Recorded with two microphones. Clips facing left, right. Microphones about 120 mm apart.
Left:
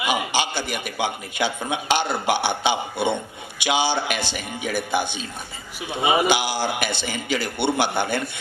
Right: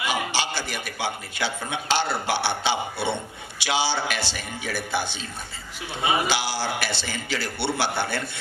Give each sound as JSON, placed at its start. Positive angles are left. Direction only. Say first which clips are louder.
{"t": 0.0, "sound": "a man's voice", "louder": "left 3 dB", "side_deg": 15}